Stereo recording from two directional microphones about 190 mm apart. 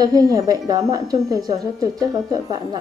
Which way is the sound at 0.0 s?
20° right (ahead or behind).